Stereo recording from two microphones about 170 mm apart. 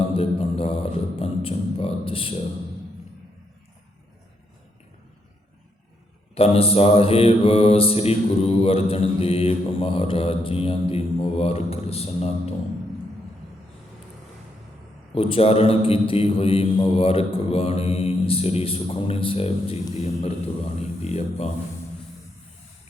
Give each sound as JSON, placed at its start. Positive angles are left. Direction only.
{"t": 0.1, "sound": "beatboxing", "side_deg": 35}
{"t": 6.3, "sound": "mantra", "side_deg": 35}
{"t": 15.1, "sound": "mantra", "side_deg": 35}